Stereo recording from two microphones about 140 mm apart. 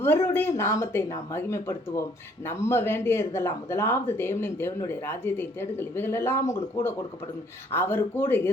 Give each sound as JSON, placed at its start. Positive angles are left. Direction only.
{"t": 0.0, "sound": "speech", "side_deg": 15}